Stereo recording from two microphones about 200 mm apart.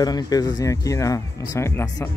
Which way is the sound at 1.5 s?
15° left (ahead or behind).